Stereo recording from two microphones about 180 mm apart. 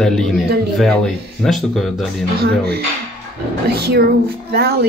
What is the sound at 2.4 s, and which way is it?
Speech, 60° right (ahead or behind).